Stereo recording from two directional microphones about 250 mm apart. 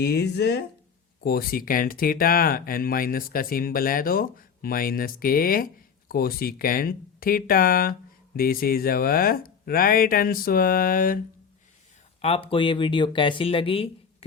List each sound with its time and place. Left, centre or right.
0.0 s speech: left
12.2 s speech: left